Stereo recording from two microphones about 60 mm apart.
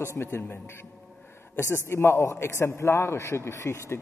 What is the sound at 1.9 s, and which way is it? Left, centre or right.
A man's voice, left.